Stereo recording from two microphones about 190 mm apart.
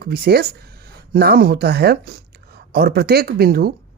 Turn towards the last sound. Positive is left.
turn(degrees=-50)  # may be behind; listen again after turning